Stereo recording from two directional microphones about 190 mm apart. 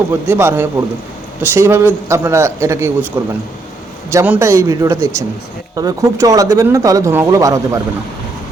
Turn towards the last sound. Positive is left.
turn(degrees=-15)  # may be behind; listen again after turning